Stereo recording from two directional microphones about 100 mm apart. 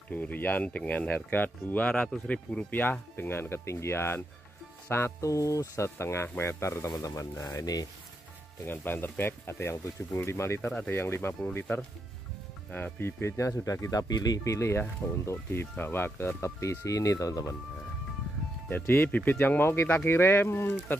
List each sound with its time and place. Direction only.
0.1 s speech: 15° left (ahead or behind); by 7.8 s 40° left (ahead or behind)
8.6 s speech: 20° left (ahead or behind)
10.7 s speech: 15° left (ahead or behind)
11.0 s speech: 25° left (ahead or behind)
12.7 s speech: 20° left (ahead or behind)
18.7 s speech: 20° left (ahead or behind)